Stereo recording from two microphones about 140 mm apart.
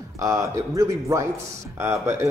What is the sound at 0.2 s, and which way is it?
Speech, 20° right (ahead or behind).